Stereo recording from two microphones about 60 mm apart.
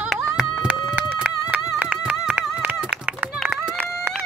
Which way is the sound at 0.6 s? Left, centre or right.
Right.